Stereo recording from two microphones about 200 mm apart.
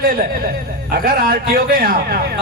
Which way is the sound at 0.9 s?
45° right (ahead or behind).